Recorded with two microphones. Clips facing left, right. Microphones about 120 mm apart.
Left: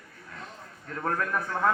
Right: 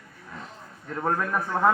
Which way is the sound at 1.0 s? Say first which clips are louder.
Right 3 dB; 20° right (ahead or behind).